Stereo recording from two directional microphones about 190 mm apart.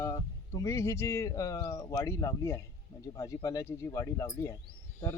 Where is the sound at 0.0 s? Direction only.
20° left (ahead or behind).